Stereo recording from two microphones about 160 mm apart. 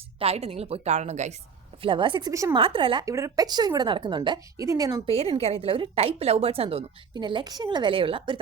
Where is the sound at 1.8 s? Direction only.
30° right (ahead or behind).